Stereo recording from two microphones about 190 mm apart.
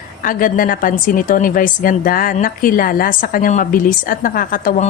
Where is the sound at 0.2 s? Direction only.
45° left (ahead or behind).